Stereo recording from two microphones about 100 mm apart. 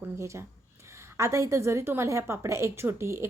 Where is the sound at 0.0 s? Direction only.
30° right (ahead or behind).